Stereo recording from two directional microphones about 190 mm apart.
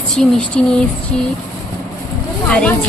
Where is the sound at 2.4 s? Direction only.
5° left (ahead or behind).